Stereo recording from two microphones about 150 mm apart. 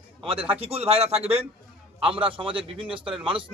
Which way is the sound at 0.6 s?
40° right (ahead or behind).